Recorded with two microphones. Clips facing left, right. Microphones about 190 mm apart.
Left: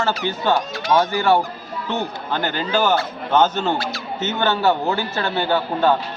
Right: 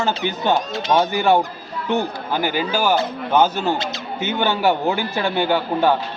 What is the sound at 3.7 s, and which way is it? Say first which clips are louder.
Speech: even; 20° right (ahead or behind).